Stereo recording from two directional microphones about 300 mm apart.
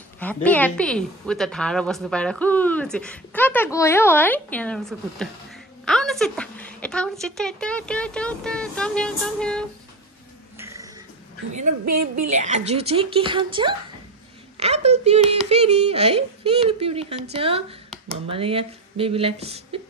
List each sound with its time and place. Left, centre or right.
0.2 s a woman's voice: centre
10.6 s a sound: centre
11.5 s a woman's voice: right
12.4 s speech: right